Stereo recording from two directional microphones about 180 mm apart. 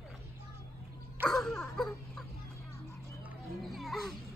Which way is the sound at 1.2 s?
5° left (ahead or behind).